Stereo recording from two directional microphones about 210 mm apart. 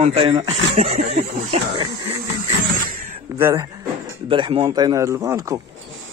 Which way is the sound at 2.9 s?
40° right (ahead or behind).